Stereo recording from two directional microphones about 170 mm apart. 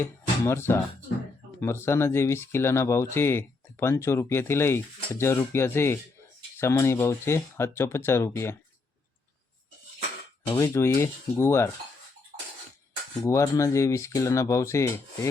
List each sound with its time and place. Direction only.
0.0 s speech: 15° left (ahead or behind)
10.5 s speech: 15° left (ahead or behind)
13.2 s speech: 15° left (ahead or behind)